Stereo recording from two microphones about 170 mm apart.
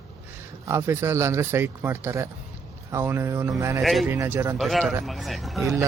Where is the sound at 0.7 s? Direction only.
15° right (ahead or behind).